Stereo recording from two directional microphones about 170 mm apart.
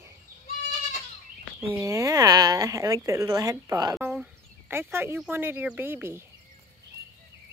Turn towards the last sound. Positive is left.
turn(degrees=-15)  # may be behind; listen again after turning